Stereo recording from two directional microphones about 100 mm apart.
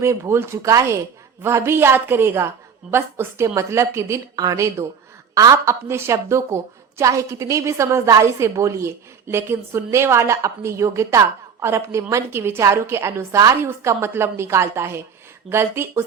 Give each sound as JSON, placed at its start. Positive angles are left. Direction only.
{"t": 0.0, "sound": "a woman's voice", "side_deg": -25}